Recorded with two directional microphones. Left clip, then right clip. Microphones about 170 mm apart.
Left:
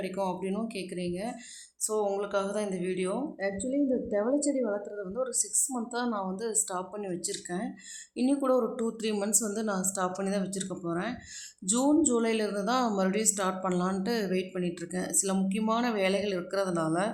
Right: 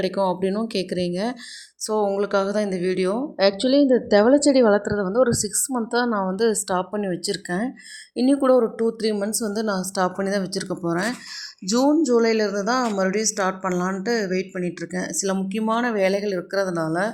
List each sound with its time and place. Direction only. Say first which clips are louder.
0.0 s speech: right 10 dB; 35° right (ahead or behind)
3.3 s speech: right 13 dB; 50° right (ahead or behind); by 11.1 s 30° right (ahead or behind)
11.9 s a woman's voice: right 7 dB; 15° right (ahead or behind)